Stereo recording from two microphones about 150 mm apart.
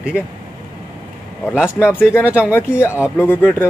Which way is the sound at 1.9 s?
15° left (ahead or behind).